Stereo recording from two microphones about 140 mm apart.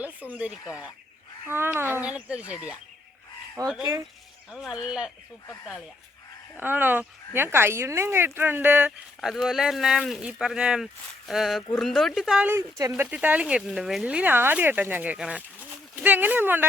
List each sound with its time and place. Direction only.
0.0 s speech: 10° right (ahead or behind)
3.6 s fowl: 25° right (ahead or behind)
4.5 s speech: 5° right (ahead or behind)
6.6 s speech: 15° right (ahead or behind)
9.2 s speech: centre (ahead or behind)